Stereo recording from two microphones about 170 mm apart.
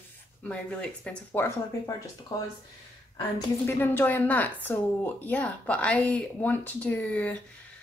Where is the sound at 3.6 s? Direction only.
10° left (ahead or behind).